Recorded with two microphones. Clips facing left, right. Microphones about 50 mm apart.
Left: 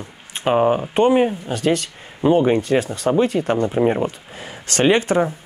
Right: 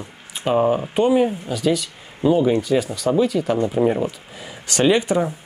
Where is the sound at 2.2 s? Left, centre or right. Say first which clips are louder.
Left 1 dB; left.